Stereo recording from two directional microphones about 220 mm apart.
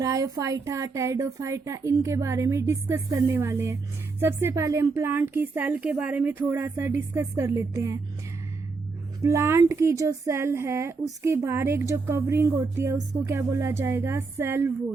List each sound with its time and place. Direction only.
0.0 s a woman's voice: 15° right (ahead or behind)
9.2 s a woman's voice: 15° right (ahead or behind)